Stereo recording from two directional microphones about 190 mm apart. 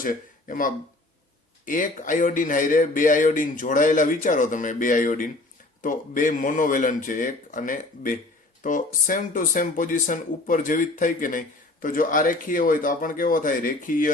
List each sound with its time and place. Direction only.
0.0 s speech: 45° left (ahead or behind)